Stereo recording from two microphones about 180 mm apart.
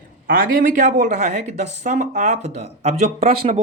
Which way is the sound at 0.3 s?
50° right (ahead or behind).